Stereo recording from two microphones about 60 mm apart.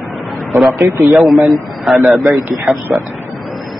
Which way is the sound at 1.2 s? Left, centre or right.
Centre.